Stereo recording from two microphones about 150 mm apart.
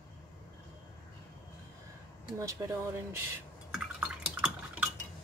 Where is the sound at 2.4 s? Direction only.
20° right (ahead or behind).